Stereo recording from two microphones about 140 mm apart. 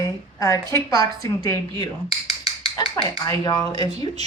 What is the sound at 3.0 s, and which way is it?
A woman's voice, 25° left (ahead or behind).